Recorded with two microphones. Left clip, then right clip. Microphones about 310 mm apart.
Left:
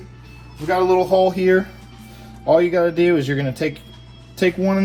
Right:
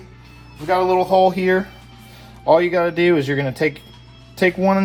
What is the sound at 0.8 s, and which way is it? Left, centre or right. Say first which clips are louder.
Speech: even; right.